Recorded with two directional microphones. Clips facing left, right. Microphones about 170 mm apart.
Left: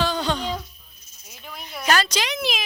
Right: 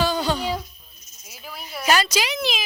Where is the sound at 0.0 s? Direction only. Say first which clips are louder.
Right 2 dB; 10° right (ahead or behind).